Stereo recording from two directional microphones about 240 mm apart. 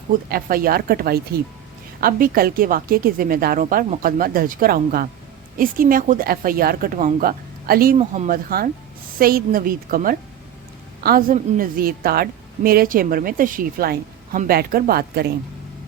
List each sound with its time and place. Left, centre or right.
0.3 s a woman's voice: right